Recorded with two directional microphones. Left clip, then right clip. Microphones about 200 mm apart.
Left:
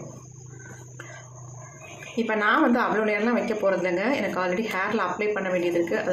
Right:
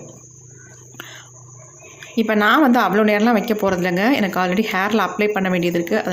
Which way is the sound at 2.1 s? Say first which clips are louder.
Right 7 dB; 55° right (ahead or behind).